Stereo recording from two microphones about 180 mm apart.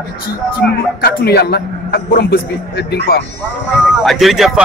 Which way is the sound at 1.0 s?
60° left (ahead or behind).